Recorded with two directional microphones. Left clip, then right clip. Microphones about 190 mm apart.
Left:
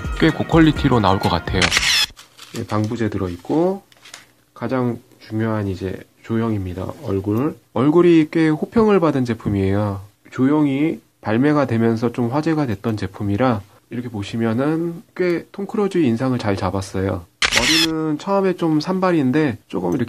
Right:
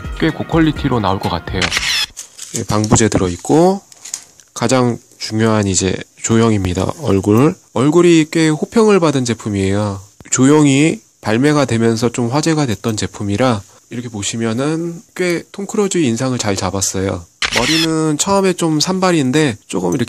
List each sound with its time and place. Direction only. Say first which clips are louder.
0.0 s speech: even; centre (ahead or behind)
2.5 s speech: right 8 dB; 35° right (ahead or behind); by 7.5 s 55° right (ahead or behind)
7.7 s speech: right 2 dB; 30° right (ahead or behind)
10.3 s speech: right 7 dB; 50° right (ahead or behind)
11.2 s speech: right 4 dB; 30° right (ahead or behind)
17.4 s speech: right 1 dB; centre (ahead or behind)
17.9 s speech: right 5 dB; 40° right (ahead or behind)